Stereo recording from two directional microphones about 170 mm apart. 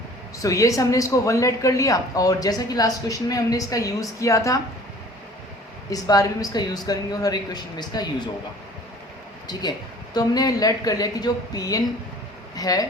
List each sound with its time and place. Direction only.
0.4 s speech: 20° left (ahead or behind)
5.9 s speech: 20° left (ahead or behind)
9.5 s speech: 25° left (ahead or behind)